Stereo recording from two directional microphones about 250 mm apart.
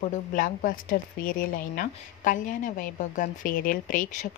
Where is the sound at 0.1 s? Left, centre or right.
Left.